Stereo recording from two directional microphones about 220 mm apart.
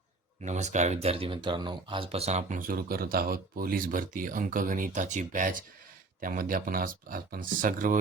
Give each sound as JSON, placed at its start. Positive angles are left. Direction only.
{"t": 0.4, "sound": "speech", "side_deg": -30}